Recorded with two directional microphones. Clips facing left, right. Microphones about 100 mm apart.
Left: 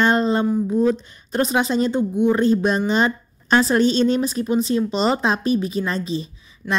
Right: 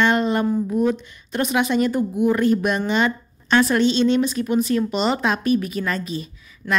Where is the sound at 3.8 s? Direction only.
40° left (ahead or behind).